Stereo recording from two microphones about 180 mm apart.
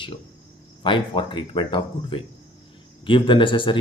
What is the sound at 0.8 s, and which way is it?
Speech, 25° left (ahead or behind).